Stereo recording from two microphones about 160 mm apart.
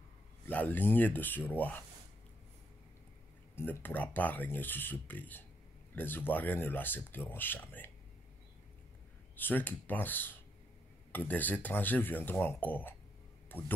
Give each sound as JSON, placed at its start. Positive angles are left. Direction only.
{"t": 0.5, "sound": "speech", "side_deg": 10}
{"t": 3.5, "sound": "speech", "side_deg": 10}
{"t": 9.4, "sound": "speech", "side_deg": 10}